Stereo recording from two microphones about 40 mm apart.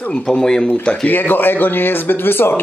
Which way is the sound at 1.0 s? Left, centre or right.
Left.